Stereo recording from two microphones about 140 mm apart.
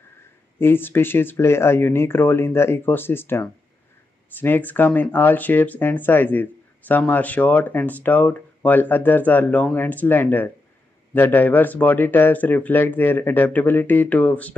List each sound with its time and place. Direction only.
0.6 s speech: 15° left (ahead or behind)